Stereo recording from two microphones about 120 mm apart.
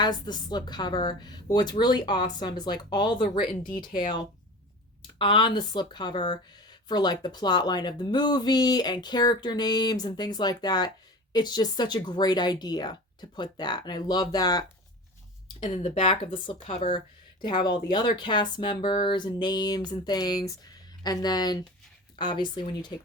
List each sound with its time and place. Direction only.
0.0 s speech: 35° left (ahead or behind)
15.7 s speech: 70° left (ahead or behind)
16.3 s speech: 45° left (ahead or behind)